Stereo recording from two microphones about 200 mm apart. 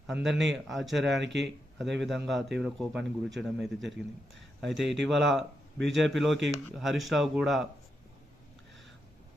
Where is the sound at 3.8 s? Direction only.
65° right (ahead or behind).